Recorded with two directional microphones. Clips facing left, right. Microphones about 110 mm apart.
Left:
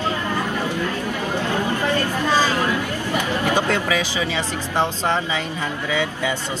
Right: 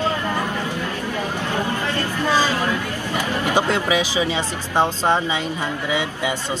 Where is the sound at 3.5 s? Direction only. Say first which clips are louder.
Right 2 dB; 15° right (ahead or behind).